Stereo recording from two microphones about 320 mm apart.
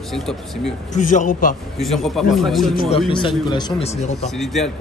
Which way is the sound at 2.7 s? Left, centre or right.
Centre.